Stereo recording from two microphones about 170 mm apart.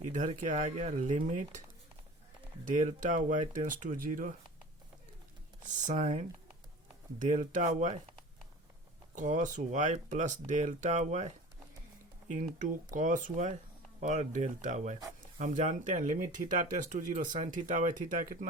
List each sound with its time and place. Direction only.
0.0 s speech: 50° right (ahead or behind)
2.6 s speech: 50° right (ahead or behind)
5.6 s speech: 45° right (ahead or behind)
9.1 s speech: 45° right (ahead or behind)
12.5 s speech: 45° right (ahead or behind)